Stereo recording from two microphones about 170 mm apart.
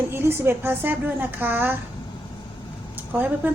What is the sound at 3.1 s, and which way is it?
Speech, 10° right (ahead or behind).